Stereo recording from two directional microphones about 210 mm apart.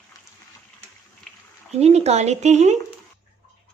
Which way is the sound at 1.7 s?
30° right (ahead or behind).